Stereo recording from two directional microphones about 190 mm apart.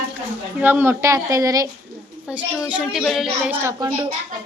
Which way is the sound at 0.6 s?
10° right (ahead or behind).